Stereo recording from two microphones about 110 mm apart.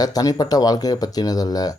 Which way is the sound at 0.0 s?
35° left (ahead or behind).